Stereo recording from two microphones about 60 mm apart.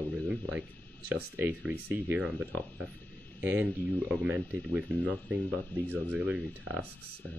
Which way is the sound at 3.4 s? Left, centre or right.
Right.